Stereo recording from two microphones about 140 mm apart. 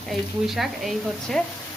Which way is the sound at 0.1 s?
Centre (ahead or behind).